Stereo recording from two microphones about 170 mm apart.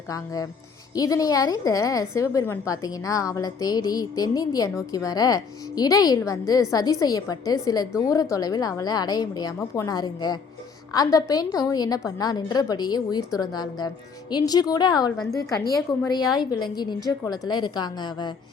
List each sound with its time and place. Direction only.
0.1 s a woman's voice: 20° left (ahead or behind)